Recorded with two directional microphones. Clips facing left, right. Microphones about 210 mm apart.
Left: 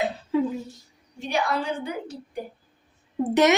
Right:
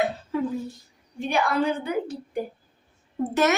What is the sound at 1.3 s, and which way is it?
A woman's voice, 55° right (ahead or behind).